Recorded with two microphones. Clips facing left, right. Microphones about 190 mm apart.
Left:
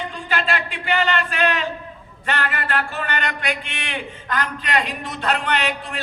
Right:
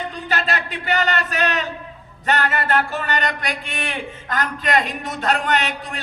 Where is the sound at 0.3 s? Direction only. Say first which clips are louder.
Left 1 dB; 40° right (ahead or behind).